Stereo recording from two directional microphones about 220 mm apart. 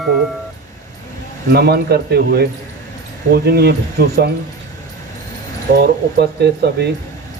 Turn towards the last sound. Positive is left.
turn(degrees=-50)  # may be behind; listen again after turning